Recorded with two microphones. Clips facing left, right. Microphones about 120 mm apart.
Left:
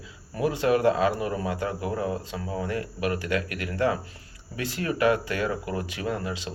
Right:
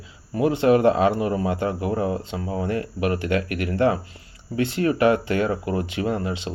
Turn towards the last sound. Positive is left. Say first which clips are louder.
# right 5 dB
turn(degrees=-25)  # may be behind; listen again after turning